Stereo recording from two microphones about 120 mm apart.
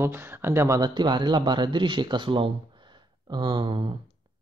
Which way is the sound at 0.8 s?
40° right (ahead or behind).